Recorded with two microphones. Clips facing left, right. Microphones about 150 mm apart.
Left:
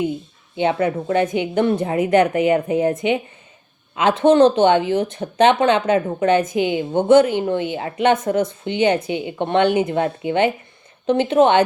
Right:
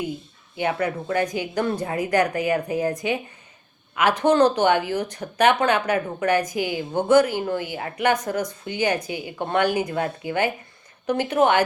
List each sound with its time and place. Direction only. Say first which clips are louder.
0.0 s speech: left 7 dB; 25° left (ahead or behind)